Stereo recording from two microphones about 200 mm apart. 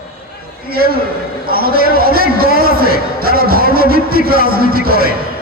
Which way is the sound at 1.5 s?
50° right (ahead or behind).